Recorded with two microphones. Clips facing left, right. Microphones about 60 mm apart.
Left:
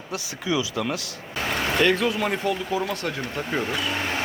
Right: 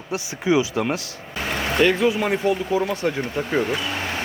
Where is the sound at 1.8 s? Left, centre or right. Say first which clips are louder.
Right 4 dB; centre.